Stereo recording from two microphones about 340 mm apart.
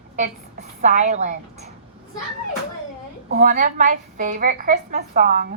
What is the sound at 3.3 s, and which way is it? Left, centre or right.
A woman's voice, right.